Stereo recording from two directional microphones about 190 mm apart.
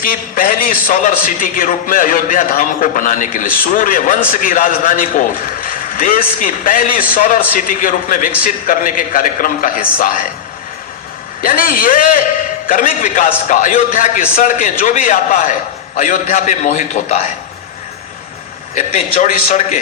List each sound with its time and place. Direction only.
0.0 s a man's voice: 45° left (ahead or behind)
11.4 s a man's voice: 50° left (ahead or behind)
18.7 s a man's voice: 35° left (ahead or behind)